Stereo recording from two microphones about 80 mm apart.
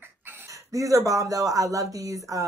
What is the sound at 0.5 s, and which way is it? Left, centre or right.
Speech, right.